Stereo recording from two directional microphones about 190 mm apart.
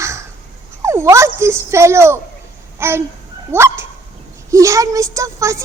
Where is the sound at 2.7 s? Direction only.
15° right (ahead or behind).